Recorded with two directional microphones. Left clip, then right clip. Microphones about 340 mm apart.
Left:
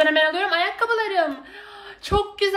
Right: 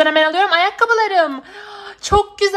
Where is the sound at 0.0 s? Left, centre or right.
Centre.